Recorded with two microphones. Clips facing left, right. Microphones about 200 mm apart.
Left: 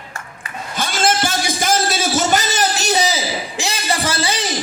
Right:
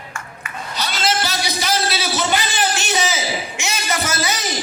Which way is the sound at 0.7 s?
50° left (ahead or behind).